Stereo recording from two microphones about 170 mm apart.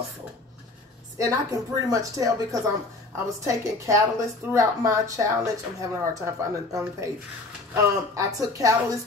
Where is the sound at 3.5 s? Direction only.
15° right (ahead or behind).